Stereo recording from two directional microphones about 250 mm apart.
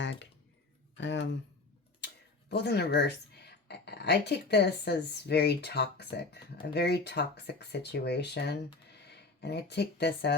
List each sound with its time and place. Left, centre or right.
0.0 s a sound: left
0.9 s speech: left
2.5 s speech: left